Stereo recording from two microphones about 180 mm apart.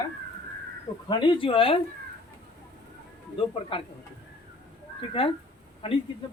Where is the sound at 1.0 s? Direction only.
25° left (ahead or behind).